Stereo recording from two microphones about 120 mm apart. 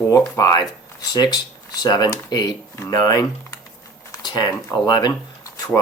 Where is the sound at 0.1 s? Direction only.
30° left (ahead or behind).